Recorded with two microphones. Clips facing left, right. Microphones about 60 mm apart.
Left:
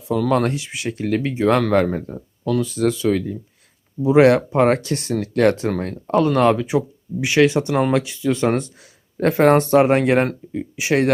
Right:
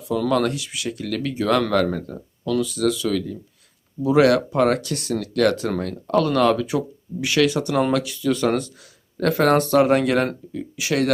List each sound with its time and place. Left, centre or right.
0.3 s speech: left